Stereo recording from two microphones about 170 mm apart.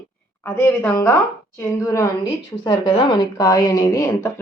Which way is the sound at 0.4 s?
10° left (ahead or behind).